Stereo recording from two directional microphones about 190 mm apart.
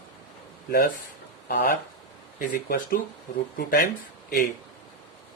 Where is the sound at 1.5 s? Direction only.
60° left (ahead or behind).